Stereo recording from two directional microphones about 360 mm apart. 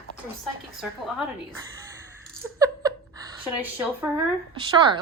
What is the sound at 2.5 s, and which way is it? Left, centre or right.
Laughter, centre.